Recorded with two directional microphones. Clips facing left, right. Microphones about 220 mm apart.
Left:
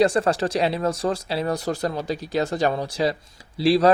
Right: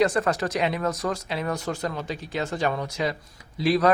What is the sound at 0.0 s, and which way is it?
Speech, 30° left (ahead or behind).